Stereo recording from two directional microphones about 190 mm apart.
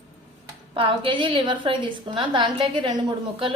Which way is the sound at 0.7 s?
30° right (ahead or behind).